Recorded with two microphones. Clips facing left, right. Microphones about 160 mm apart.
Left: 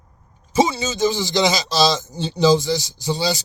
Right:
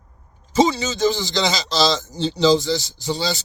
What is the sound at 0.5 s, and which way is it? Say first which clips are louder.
A man's voice: right 1 dB; 20° left (ahead or behind).